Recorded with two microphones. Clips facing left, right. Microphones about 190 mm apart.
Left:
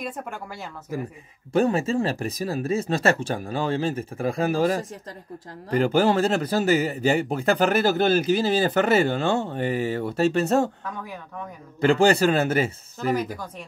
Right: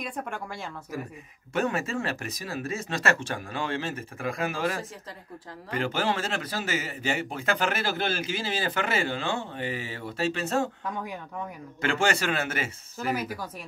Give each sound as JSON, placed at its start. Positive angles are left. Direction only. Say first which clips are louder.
{"t": 0.0, "sound": "speech", "louder": "left 2 dB", "side_deg": 5}
{"t": 1.5, "sound": "a man's voice", "louder": "left 7 dB", "side_deg": 30}
{"t": 11.0, "sound": "speech", "louder": "right 1 dB", "side_deg": -15}
{"t": 11.8, "sound": "a man's voice", "louder": "left 8 dB", "side_deg": 35}
{"t": 13.1, "sound": "speech", "louder": "left 5 dB", "side_deg": -5}